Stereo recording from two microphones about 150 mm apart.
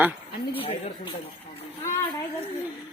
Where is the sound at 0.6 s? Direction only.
40° left (ahead or behind).